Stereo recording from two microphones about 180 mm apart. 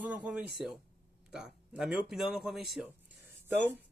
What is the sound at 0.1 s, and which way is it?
Speech, 5° right (ahead or behind).